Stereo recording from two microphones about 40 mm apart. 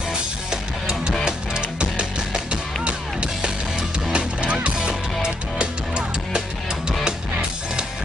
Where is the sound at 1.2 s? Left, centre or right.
Right.